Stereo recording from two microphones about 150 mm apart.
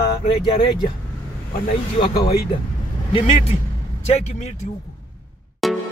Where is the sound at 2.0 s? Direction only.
35° left (ahead or behind).